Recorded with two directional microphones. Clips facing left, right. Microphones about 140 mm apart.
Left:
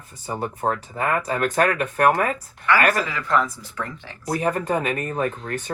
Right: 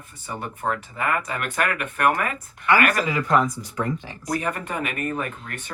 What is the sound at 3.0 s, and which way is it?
Speech, 15° right (ahead or behind).